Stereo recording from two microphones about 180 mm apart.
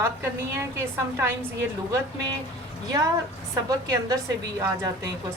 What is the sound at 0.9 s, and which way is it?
Speech, 15° right (ahead or behind).